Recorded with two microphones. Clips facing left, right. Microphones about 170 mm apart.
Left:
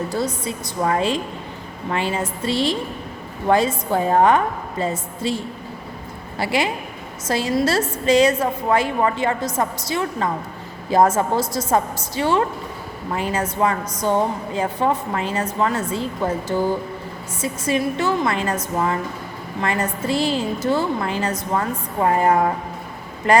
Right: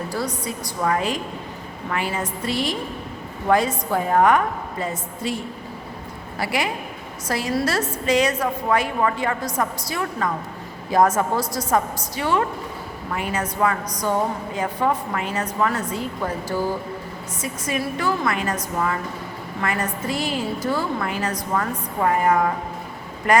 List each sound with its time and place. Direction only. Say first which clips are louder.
0.1 s a woman's voice: left 3 dB; 25° left (ahead or behind)
6.4 s a woman's voice: left 3 dB; 25° left (ahead or behind)